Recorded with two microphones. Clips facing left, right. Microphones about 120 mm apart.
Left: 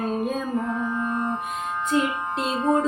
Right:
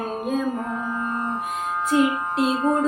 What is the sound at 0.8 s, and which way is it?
Music, 45° right (ahead or behind).